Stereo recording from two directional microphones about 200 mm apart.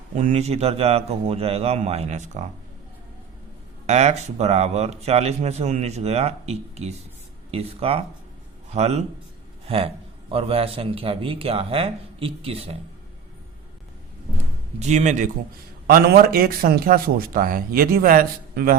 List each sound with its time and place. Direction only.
0.2 s speech: 35° right (ahead or behind)
3.8 s speech: 35° right (ahead or behind)
14.8 s speech: 35° right (ahead or behind)